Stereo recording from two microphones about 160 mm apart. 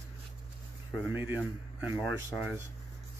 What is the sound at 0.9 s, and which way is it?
Speech, 10° right (ahead or behind).